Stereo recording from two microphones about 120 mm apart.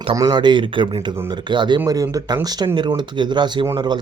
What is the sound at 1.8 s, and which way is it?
Speech, 30° right (ahead or behind).